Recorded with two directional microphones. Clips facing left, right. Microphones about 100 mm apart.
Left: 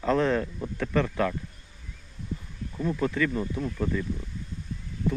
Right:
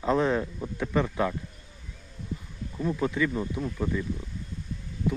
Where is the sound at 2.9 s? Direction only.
15° right (ahead or behind).